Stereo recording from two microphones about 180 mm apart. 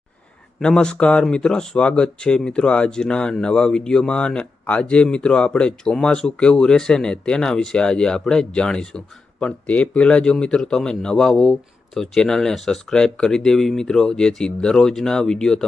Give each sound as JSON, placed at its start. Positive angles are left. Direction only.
{"t": 0.6, "sound": "speech", "side_deg": 5}